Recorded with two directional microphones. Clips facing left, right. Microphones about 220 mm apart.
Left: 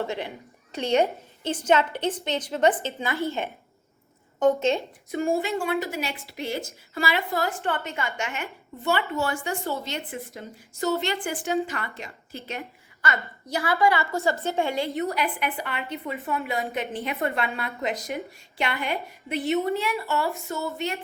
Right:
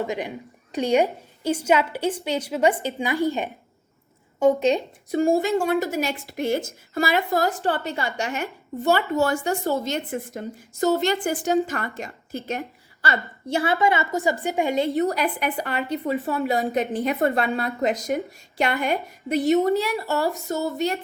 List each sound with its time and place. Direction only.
0.0 s a woman's voice: 15° right (ahead or behind)
5.1 s a woman's voice: 40° right (ahead or behind)
13.0 s a woman's voice: 30° right (ahead or behind)
14.9 s a woman's voice: 40° right (ahead or behind)